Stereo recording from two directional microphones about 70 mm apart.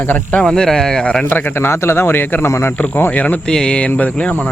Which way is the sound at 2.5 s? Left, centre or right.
Left.